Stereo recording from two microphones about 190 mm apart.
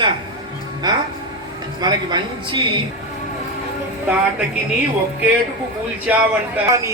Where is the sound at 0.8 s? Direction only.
20° right (ahead or behind).